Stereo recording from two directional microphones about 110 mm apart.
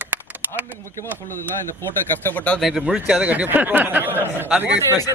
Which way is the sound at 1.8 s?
20° left (ahead or behind).